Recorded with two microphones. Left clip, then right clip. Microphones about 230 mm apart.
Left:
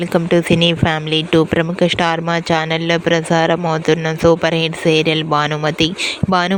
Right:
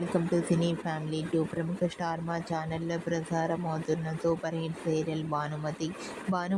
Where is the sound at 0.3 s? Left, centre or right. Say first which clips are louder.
Left 16 dB; left.